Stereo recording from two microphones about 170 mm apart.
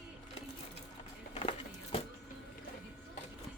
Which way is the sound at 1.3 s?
35° left (ahead or behind).